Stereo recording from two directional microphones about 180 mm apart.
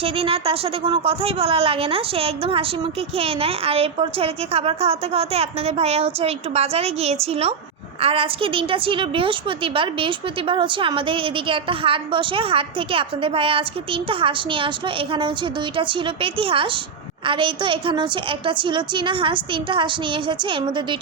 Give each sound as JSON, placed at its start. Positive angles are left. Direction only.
{"t": 0.0, "sound": "a woman's voice", "side_deg": -30}
{"t": 15.7, "sound": "a woman's voice", "side_deg": -30}